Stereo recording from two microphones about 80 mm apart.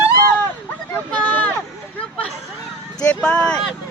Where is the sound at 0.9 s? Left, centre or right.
Left.